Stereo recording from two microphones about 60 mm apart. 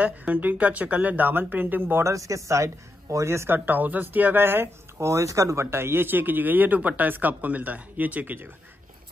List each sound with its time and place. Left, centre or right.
0.0 s speech: right
2.0 s a man's voice: right
3.4 s speech: right
5.0 s a man's voice: right
5.7 s speech: right